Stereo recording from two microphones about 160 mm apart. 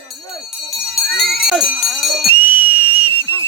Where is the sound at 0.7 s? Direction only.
Centre (ahead or behind).